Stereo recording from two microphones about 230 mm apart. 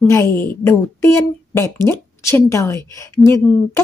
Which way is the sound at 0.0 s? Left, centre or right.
Centre.